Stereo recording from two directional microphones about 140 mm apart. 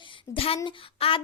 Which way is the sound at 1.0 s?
45° left (ahead or behind).